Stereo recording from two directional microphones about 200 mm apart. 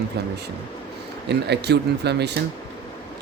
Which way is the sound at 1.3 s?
55° right (ahead or behind).